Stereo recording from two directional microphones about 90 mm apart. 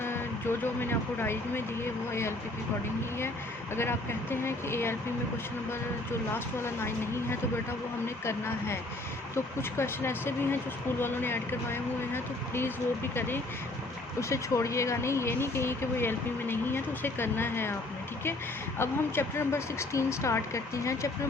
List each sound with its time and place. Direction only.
0.0 s speech: 25° left (ahead or behind)
3.8 s speech: 25° left (ahead or behind)
6.6 s speech: 30° left (ahead or behind)
18.8 s speech: 30° left (ahead or behind)